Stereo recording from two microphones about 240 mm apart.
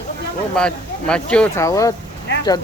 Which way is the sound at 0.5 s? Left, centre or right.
Centre.